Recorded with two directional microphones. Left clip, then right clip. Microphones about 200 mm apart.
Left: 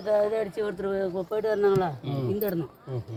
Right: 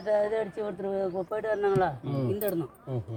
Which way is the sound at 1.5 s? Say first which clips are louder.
Left 1 dB; 30° right (ahead or behind).